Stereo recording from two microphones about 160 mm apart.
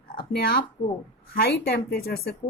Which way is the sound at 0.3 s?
75° left (ahead or behind).